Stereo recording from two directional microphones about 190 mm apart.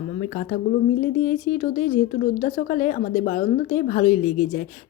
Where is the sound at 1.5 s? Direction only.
40° left (ahead or behind).